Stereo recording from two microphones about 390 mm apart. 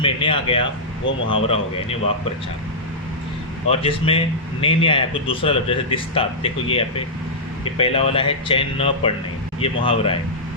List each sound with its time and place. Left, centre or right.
0.0 s a man's voice: centre
1.0 s speech: left
1.5 s a man's voice: centre
3.7 s a man's voice: centre